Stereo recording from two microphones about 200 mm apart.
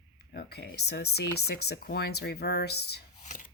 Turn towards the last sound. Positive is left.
turn(degrees=40)  # may be behind; listen again after turning